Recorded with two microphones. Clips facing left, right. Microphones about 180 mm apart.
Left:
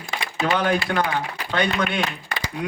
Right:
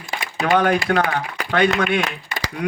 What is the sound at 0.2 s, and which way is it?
Speech, 45° right (ahead or behind).